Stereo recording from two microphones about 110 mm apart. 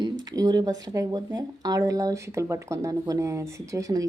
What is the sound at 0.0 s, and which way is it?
Speech, 35° right (ahead or behind).